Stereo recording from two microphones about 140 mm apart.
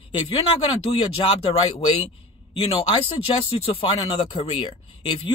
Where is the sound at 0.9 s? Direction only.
45° left (ahead or behind).